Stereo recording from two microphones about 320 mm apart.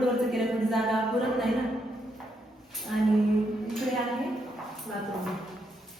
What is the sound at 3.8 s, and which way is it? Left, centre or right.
Speech, centre.